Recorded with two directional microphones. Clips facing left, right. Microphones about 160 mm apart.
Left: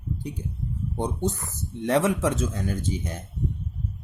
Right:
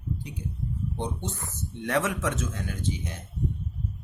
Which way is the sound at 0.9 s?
45° left (ahead or behind).